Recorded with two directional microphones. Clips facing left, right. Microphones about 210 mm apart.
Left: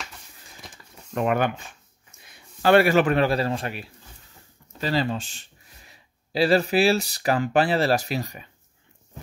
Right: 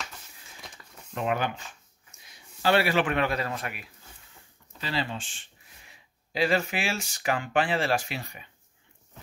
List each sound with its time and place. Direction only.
1.1 s speech: 55° left (ahead or behind); by 3.9 s 30° left (ahead or behind)
4.7 s speech: 40° left (ahead or behind)